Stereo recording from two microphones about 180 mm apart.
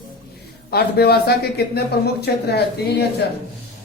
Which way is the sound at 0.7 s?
60° left (ahead or behind).